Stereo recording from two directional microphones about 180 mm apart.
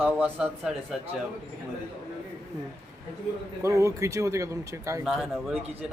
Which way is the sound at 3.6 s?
15° right (ahead or behind).